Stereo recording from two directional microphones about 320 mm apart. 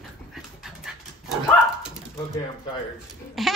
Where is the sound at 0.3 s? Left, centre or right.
Centre.